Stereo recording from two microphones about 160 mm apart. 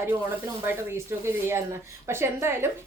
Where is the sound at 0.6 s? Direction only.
15° right (ahead or behind).